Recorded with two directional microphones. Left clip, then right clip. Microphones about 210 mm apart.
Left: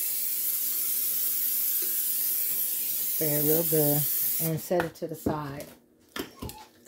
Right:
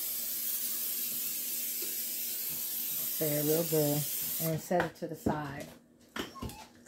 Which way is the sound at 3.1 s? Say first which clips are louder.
Left 3 dB; 20° left (ahead or behind).